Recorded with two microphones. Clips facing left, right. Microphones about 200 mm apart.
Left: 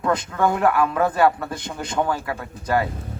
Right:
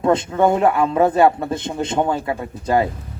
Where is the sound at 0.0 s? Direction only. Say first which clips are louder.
Right 5 dB; 25° right (ahead or behind).